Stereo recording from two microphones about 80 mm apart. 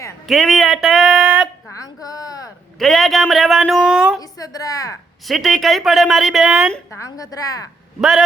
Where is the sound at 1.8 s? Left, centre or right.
Left.